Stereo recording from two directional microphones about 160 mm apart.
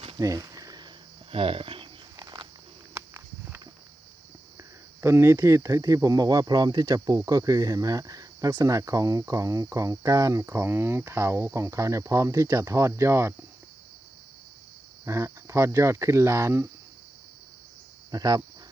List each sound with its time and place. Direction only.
0.2 s a sound: 20° right (ahead or behind)
1.3 s speech: 35° right (ahead or behind)
2.1 s a sound: 25° right (ahead or behind)
4.5 s speech: 15° right (ahead or behind)
15.0 s speech: 15° right (ahead or behind)
18.1 s speech: 25° right (ahead or behind)